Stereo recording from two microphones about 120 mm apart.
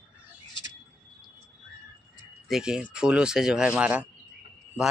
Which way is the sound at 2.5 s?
5° right (ahead or behind).